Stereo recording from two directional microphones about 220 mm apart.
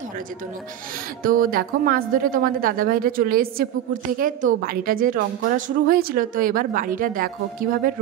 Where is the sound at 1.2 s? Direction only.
40° right (ahead or behind).